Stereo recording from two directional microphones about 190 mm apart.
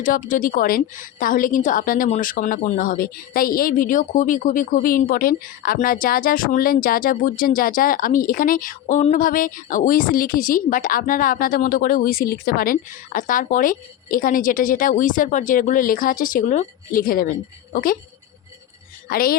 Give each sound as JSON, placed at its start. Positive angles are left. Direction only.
{"t": 0.0, "sound": "a woman's voice", "side_deg": 45}
{"t": 19.0, "sound": "a woman's voice", "side_deg": 50}